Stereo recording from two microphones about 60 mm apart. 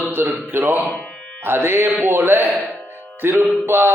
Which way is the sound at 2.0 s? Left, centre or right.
Right.